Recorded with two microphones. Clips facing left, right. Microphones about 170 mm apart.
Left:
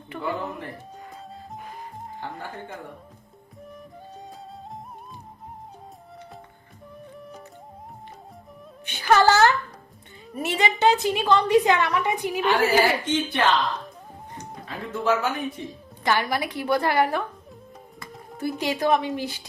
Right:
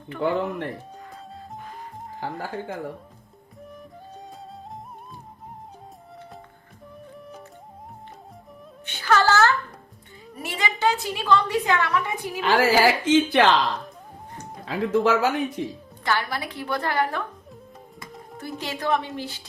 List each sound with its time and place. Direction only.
0.2 s speech: 70° right (ahead or behind)
2.2 s a woman's voice: 90° right
7.2 s music: centre (ahead or behind)
8.8 s music: 15° left (ahead or behind)
10.4 s a woman's voice: 25° left (ahead or behind)
12.5 s a woman's voice: 90° right
14.6 s a woman's voice: 90° right
16.0 s a woman's voice: 15° left (ahead or behind)
18.3 s a woman's voice: 10° left (ahead or behind)